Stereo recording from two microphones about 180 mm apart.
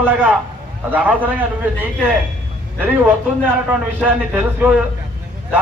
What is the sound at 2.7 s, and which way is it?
A man's voice, 10° right (ahead or behind).